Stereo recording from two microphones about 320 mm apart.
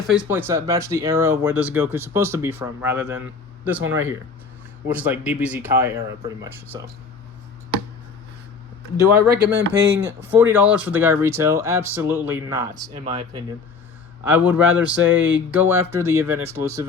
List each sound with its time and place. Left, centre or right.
0.1 s speech: centre
9.3 s speech: right
10.3 s speech: centre
14.3 s speech: centre